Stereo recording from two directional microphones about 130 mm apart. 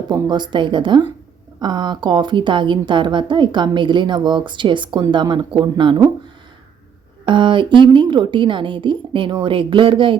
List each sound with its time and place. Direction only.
0.1 s speech: 35° right (ahead or behind)
7.3 s speech: 40° right (ahead or behind)